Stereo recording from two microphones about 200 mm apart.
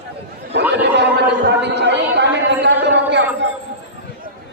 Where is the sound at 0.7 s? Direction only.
60° right (ahead or behind).